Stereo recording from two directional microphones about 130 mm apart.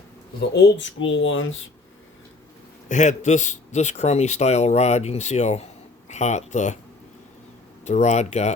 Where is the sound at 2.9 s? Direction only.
65° left (ahead or behind).